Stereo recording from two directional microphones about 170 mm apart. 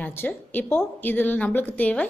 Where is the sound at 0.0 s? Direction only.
10° left (ahead or behind).